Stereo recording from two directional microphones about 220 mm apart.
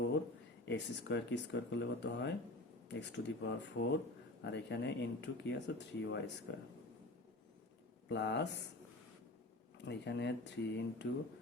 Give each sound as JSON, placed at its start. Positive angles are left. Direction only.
{"t": 0.6, "sound": "speech", "side_deg": 55}
{"t": 8.1, "sound": "speech", "side_deg": 50}
{"t": 9.7, "sound": "speech", "side_deg": 50}